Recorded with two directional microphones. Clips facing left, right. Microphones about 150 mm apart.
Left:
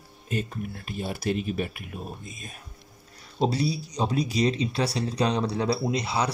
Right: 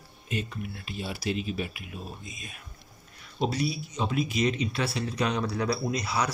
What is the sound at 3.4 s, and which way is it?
Speech, 30° left (ahead or behind).